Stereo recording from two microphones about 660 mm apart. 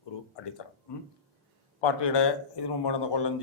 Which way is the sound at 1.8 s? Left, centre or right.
Left.